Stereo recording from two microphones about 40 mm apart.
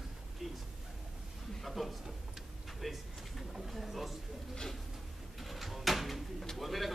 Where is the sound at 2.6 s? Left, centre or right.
Centre.